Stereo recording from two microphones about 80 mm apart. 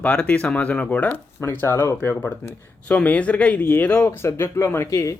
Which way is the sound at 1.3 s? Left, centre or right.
Left.